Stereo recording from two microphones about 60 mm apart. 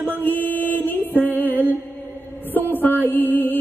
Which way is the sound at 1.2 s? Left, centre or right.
Left.